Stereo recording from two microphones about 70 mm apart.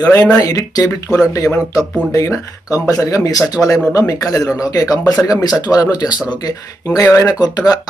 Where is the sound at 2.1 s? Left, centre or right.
Left.